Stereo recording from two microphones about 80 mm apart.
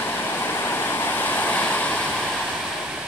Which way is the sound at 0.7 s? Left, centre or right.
Left.